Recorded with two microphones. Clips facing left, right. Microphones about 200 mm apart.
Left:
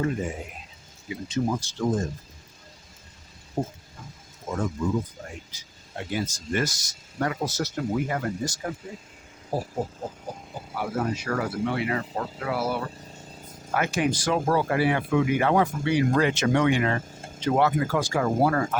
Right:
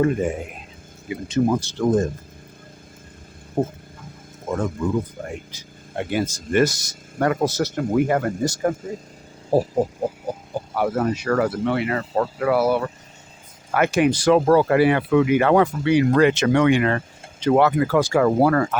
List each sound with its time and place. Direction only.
0.0 s speech: 60° right (ahead or behind)
3.6 s speech: 55° right (ahead or behind)
9.5 s speech: 65° right (ahead or behind)
10.8 s speech: 60° right (ahead or behind)
13.7 s speech: 65° right (ahead or behind)